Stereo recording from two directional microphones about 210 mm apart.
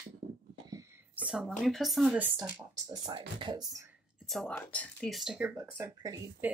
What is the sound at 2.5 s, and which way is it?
Speech, 15° right (ahead or behind).